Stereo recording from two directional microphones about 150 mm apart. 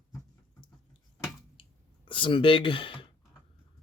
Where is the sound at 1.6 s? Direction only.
35° left (ahead or behind).